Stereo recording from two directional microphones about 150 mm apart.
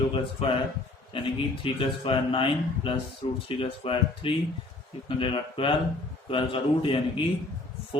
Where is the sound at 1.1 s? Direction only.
35° left (ahead or behind).